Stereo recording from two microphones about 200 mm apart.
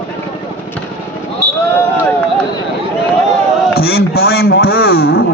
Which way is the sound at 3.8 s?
50° left (ahead or behind).